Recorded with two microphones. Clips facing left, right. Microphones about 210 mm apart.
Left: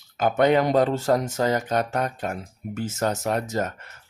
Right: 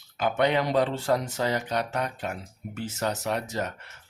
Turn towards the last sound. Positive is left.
turn(degrees=45)  # may be behind; listen again after turning